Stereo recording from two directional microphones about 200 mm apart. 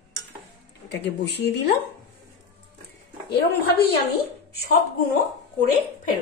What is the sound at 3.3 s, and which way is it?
Speech, 55° left (ahead or behind).